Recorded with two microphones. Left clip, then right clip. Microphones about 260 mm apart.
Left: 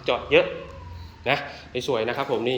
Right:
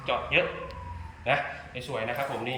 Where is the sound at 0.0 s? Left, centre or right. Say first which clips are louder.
Left 6 dB; centre.